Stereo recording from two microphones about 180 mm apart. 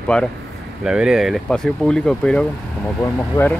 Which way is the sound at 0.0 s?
5° left (ahead or behind).